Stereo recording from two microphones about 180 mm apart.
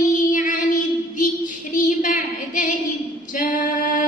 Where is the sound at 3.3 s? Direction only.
45° left (ahead or behind).